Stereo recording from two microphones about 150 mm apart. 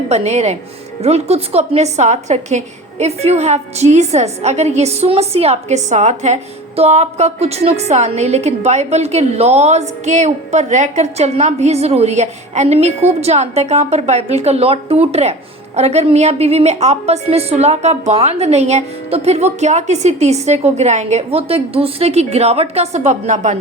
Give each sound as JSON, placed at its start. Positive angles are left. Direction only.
{"t": 0.1, "sound": "a woman's voice", "side_deg": -45}